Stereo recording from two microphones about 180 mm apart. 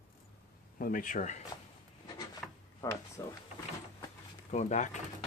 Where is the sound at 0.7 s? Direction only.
50° left (ahead or behind).